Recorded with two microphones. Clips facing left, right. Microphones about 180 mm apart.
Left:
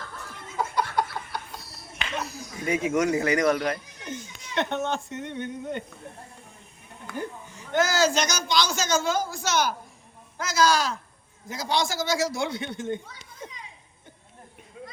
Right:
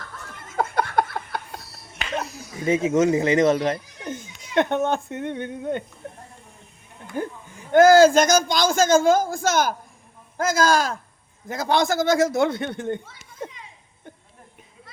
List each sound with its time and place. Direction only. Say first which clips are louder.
0.5 s a sound: right 4 dB; 55° right (ahead or behind)
2.6 s speech: right 5 dB; 25° right (ahead or behind)
4.1 s speech: right 7 dB; 50° right (ahead or behind)
7.2 s a man's voice: right 5 dB; 50° right (ahead or behind)